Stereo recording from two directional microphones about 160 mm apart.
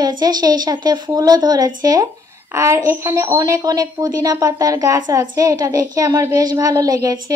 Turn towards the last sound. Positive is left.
turn(degrees=-20)  # may be behind; listen again after turning